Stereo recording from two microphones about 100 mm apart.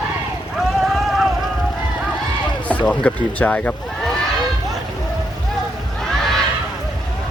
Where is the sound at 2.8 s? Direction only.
10° left (ahead or behind).